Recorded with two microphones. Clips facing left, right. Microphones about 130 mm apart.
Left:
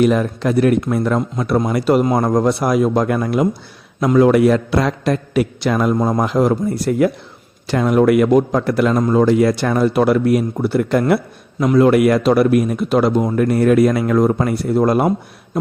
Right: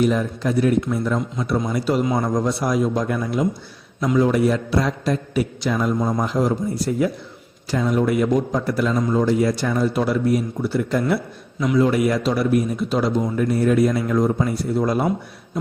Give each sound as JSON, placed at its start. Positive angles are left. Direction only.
{"t": 0.0, "sound": "a man's voice", "side_deg": 70}
{"t": 11.6, "sound": "a man's voice", "side_deg": 60}